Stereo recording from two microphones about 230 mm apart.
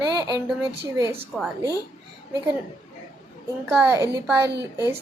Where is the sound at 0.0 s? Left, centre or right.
Centre.